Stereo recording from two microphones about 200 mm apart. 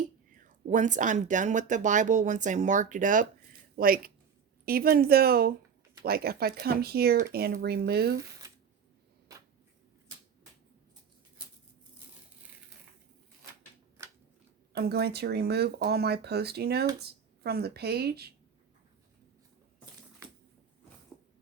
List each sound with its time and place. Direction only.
0.3 s speech: 40° right (ahead or behind)
9.3 s a sound: 15° right (ahead or behind)
14.0 s scissors: 15° right (ahead or behind)
14.7 s speech: 55° right (ahead or behind)